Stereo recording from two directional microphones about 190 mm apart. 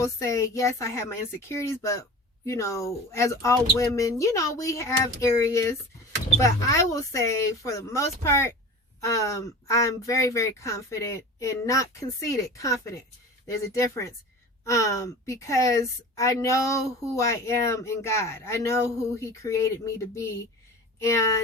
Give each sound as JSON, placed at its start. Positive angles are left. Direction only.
{"t": 0.0, "sound": "a woman's voice", "side_deg": 15}